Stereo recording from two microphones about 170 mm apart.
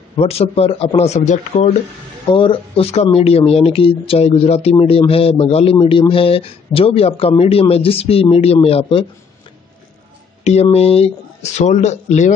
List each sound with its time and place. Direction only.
0.2 s speech: 35° left (ahead or behind)
2.3 s speech: 30° left (ahead or behind)
10.4 s speech: 40° left (ahead or behind)